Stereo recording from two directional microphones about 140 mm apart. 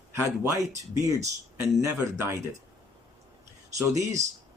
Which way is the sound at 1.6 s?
20° right (ahead or behind).